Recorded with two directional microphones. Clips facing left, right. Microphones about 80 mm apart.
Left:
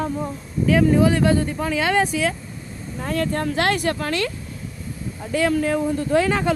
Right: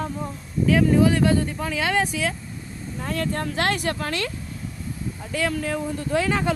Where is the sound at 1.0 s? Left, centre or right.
Left.